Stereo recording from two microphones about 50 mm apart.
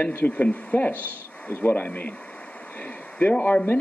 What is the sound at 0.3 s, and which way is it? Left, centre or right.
Speech, left.